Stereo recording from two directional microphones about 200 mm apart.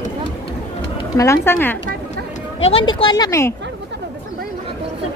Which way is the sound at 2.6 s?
25° left (ahead or behind).